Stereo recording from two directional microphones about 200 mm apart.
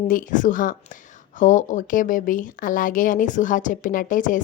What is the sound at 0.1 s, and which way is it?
A woman's voice, 40° left (ahead or behind).